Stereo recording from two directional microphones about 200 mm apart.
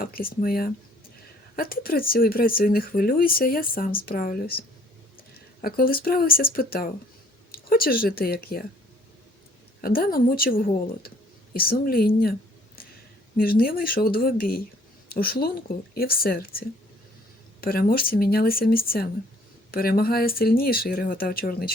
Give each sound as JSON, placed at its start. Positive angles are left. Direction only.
{"t": 0.0, "sound": "speech", "side_deg": 45}
{"t": 9.8, "sound": "speech", "side_deg": 50}
{"t": 13.3, "sound": "speech", "side_deg": 50}